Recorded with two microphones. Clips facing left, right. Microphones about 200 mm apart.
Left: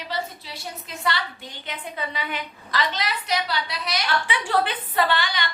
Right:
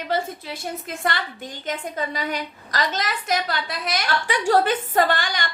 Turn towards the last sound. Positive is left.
turn(degrees=-45)  # may be behind; listen again after turning